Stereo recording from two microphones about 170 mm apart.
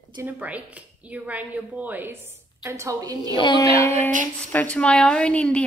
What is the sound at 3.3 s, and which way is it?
Speech, 25° left (ahead or behind).